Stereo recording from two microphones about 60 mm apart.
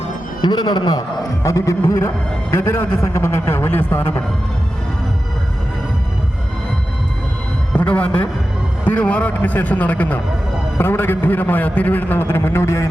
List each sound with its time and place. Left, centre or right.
1.5 s a man's voice: left
7.7 s a man's voice: left
10.8 s a man's voice: left